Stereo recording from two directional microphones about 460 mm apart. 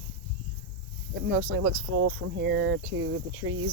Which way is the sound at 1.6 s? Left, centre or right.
Right.